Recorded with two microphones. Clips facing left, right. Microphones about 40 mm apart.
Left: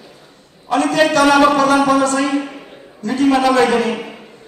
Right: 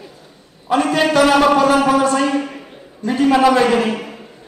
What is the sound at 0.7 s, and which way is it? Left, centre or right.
A man's voice, centre.